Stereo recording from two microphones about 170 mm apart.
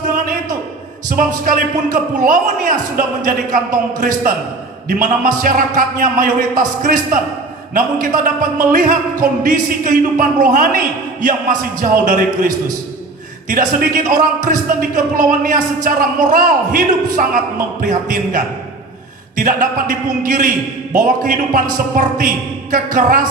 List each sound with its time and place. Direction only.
1.5 s speech: 55° right (ahead or behind)
13.5 s speech: 50° right (ahead or behind)